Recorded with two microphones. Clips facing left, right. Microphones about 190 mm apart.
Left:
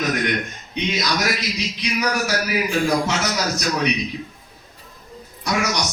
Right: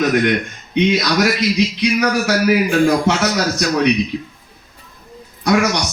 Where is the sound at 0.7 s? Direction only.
65° right (ahead or behind).